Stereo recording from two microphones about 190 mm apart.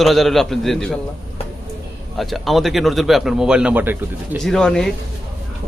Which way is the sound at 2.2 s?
Centre (ahead or behind).